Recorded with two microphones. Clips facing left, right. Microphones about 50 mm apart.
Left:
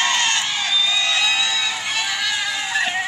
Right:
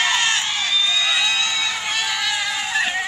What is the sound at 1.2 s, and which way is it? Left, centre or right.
Music, centre.